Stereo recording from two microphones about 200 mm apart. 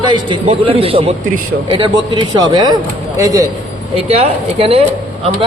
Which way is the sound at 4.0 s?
30° right (ahead or behind).